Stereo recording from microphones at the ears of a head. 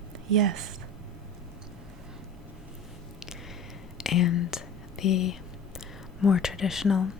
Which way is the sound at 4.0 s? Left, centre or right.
Left.